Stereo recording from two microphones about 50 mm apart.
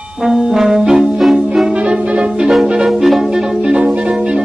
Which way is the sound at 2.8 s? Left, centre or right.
Centre.